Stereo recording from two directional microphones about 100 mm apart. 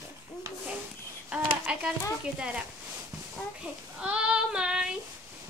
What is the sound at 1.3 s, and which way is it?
Speech, 10° right (ahead or behind).